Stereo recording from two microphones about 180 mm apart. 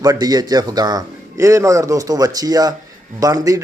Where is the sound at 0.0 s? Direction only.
20° right (ahead or behind).